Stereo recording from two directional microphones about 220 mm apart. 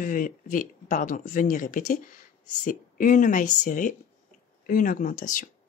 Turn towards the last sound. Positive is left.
turn(degrees=35)  # may be behind; listen again after turning